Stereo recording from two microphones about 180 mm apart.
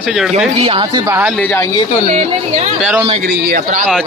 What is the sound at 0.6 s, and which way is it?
Speech, 30° right (ahead or behind).